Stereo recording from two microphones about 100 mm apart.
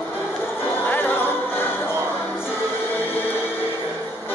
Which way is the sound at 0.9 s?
20° left (ahead or behind).